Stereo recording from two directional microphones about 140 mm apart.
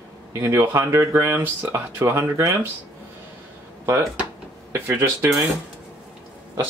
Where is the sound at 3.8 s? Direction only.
20° right (ahead or behind).